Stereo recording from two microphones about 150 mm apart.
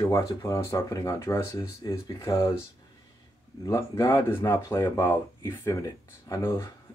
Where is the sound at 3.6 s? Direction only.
20° left (ahead or behind).